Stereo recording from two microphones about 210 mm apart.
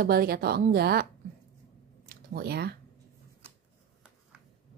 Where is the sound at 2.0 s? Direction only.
50° right (ahead or behind).